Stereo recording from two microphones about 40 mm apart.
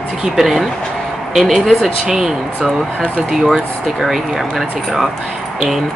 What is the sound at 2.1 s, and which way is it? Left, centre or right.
Speech, centre.